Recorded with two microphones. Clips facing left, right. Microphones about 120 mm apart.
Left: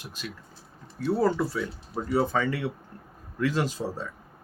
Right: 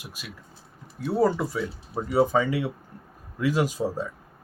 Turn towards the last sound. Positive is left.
turn(degrees=-15)  # may be behind; listen again after turning